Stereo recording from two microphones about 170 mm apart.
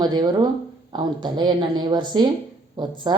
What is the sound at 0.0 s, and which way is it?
Speech, 25° right (ahead or behind).